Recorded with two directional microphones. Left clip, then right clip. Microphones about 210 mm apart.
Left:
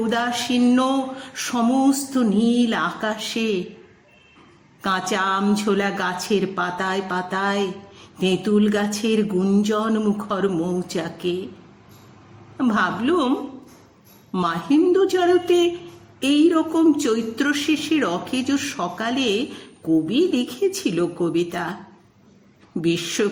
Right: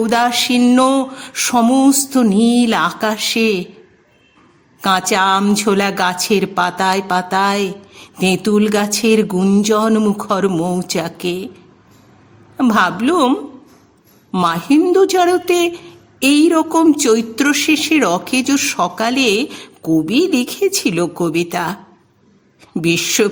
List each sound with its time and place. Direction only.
0.1 s speech: 45° right (ahead or behind)
4.8 s speech: 45° right (ahead or behind)
12.5 s speech: 45° right (ahead or behind)
14.3 s speech: 40° right (ahead or behind)